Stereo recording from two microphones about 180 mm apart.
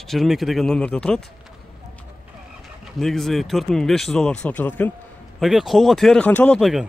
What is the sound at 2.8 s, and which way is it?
Speech, centre (ahead or behind).